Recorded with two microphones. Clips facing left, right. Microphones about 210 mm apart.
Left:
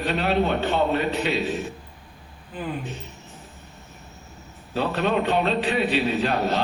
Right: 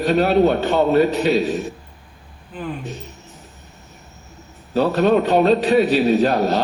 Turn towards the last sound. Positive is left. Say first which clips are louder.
# right 7 dB
turn(degrees=-40)  # may be behind; listen again after turning